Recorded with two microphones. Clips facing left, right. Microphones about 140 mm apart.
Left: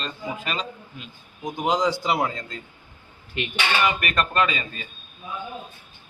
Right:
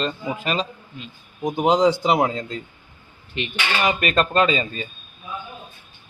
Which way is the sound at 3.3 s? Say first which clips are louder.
Right 1 dB; 5° left (ahead or behind).